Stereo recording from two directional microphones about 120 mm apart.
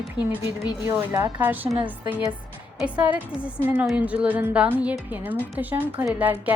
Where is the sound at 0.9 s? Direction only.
20° right (ahead or behind).